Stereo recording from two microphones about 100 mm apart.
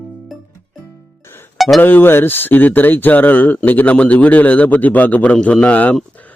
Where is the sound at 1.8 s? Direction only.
20° left (ahead or behind).